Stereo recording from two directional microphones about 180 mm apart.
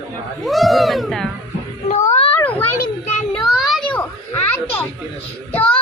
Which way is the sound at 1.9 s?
35° left (ahead or behind).